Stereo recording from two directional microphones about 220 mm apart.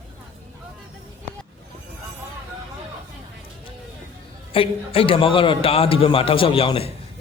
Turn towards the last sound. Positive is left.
turn(degrees=25)  # may be behind; listen again after turning